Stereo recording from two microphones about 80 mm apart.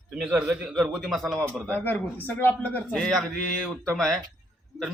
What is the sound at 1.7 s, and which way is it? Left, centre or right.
A man's voice, centre.